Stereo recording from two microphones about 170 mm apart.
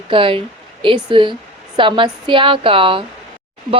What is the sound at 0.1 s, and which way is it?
A woman's voice, 30° right (ahead or behind).